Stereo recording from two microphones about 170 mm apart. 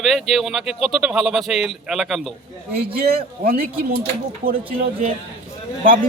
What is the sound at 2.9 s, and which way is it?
Speech, 60° right (ahead or behind).